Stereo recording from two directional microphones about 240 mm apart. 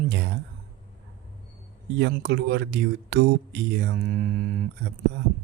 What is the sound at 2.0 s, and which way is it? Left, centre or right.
Speech, right.